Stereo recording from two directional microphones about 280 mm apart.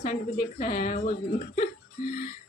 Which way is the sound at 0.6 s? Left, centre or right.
Left.